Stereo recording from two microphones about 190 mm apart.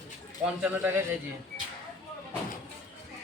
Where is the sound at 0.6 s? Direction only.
10° right (ahead or behind).